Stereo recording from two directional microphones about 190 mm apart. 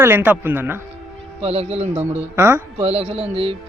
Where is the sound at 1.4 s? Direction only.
35° right (ahead or behind).